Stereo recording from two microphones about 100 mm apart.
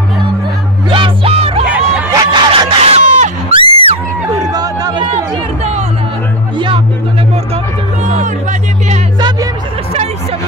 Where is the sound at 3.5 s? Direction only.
70° right (ahead or behind).